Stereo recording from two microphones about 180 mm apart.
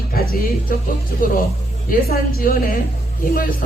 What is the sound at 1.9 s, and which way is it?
Speech, 55° left (ahead or behind).